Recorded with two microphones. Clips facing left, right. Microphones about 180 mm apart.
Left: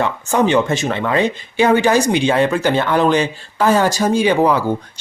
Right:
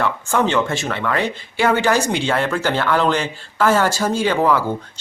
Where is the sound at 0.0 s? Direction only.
15° left (ahead or behind).